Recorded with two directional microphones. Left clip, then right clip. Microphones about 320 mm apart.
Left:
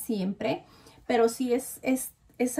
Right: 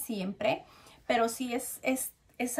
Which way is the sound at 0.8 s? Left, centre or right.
Centre.